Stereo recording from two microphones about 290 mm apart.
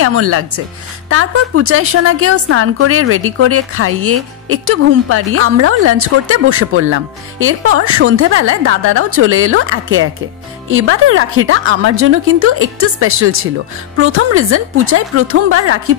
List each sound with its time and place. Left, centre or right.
0.0 s a woman's voice: right